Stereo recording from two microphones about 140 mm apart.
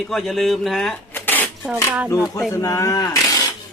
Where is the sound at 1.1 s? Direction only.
15° left (ahead or behind).